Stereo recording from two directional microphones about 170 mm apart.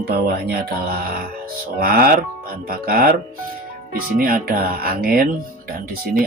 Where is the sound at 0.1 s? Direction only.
60° right (ahead or behind).